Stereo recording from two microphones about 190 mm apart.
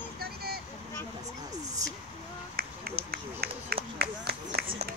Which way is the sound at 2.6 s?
50° right (ahead or behind).